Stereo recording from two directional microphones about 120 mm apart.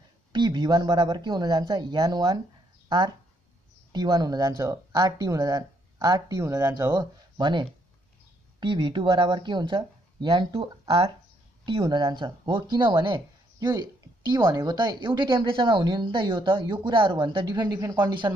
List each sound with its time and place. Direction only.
0.3 s a woman's voice: 40° right (ahead or behind)
3.9 s a woman's voice: 35° right (ahead or behind)
7.3 s speech: 40° right (ahead or behind)
11.8 s a woman's voice: 35° right (ahead or behind)